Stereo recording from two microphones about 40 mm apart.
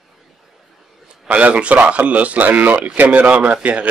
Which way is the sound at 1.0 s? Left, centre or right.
Right.